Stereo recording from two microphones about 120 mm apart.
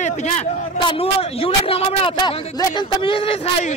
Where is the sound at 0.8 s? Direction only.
50° left (ahead or behind).